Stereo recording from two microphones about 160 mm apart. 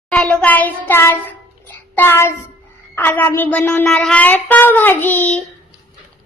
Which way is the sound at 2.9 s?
10° left (ahead or behind).